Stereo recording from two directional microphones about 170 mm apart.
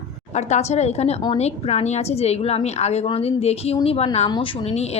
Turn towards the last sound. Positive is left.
turn(degrees=30)  # may be behind; listen again after turning